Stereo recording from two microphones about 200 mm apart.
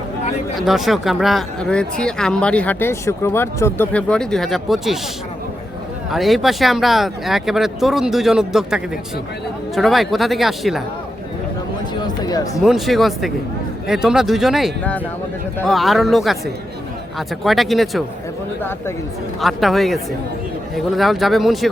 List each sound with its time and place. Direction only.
0.6 s speech: centre (ahead or behind)
6.1 s speech: centre (ahead or behind)
11.9 s a sound: 20° left (ahead or behind)
12.6 s speech: centre (ahead or behind)
19.4 s speech: centre (ahead or behind)